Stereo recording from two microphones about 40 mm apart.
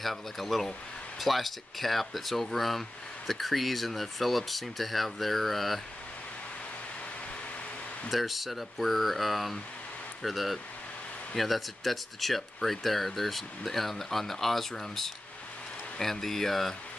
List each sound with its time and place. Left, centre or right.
0.0 s speech: centre
8.1 s speech: centre